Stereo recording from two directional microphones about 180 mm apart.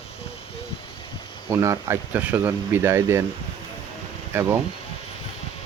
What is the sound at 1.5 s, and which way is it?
Speech, 15° right (ahead or behind).